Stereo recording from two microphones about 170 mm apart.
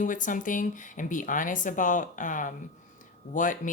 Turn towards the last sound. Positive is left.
turn(degrees=50)  # may be behind; listen again after turning